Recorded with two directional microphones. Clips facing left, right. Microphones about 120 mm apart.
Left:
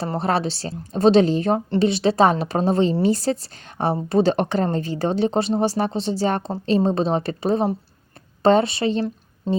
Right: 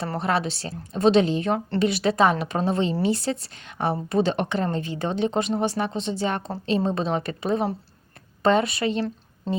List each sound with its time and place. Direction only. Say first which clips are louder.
0.2 s speech: left 2 dB; 35° left (ahead or behind)
9.5 s music: left 5 dB; 15° left (ahead or behind)